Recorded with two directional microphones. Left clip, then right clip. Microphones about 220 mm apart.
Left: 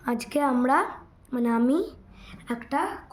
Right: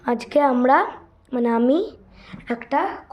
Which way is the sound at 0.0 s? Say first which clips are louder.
Right 7 dB; 20° left (ahead or behind).